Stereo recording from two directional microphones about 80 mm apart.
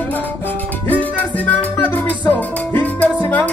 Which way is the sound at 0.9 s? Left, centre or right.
Centre.